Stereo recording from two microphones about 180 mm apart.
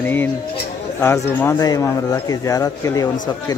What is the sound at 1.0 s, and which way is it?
Speech, 15° left (ahead or behind).